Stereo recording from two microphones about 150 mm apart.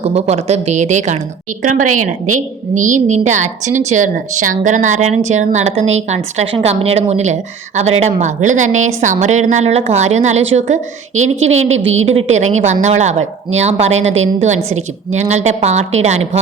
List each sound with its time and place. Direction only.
0.0 s a woman's voice: 45° right (ahead or behind)